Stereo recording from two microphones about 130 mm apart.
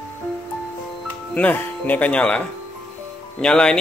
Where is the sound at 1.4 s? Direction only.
15° left (ahead or behind).